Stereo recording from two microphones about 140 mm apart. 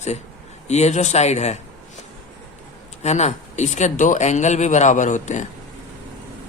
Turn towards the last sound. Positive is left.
turn(degrees=60)  # may be behind; listen again after turning